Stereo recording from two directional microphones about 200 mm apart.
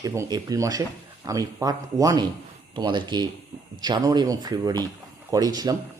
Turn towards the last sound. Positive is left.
turn(degrees=-20)  # may be behind; listen again after turning